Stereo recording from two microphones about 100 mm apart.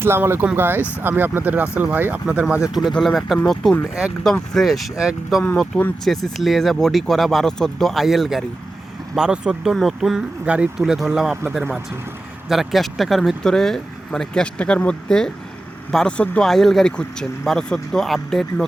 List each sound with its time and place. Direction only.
0.0 s speech: 25° right (ahead or behind)
2.9 s speech: 5° left (ahead or behind)
3.9 s speech: 5° right (ahead or behind)
5.4 s speech: 10° left (ahead or behind)
12.5 s speech: centre (ahead or behind)